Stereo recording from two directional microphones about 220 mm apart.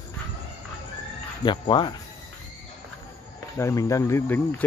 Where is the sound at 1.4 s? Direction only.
20° left (ahead or behind).